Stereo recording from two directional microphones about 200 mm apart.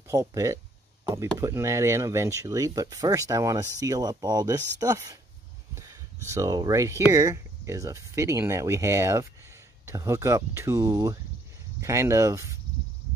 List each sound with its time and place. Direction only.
0.1 s speech: 15° right (ahead or behind)